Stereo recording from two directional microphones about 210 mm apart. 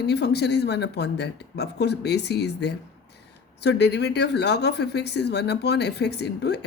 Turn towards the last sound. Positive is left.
turn(degrees=55)  # may be behind; listen again after turning